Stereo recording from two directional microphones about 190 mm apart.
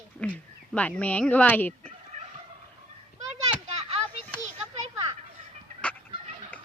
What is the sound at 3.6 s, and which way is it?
Children playing, 35° right (ahead or behind).